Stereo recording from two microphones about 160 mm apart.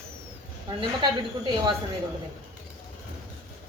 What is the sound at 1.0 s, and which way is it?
Speech, 30° right (ahead or behind).